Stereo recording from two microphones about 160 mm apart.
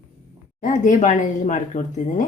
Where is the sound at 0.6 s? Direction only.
50° left (ahead or behind).